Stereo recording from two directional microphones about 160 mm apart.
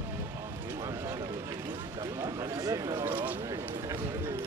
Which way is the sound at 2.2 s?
20° right (ahead or behind).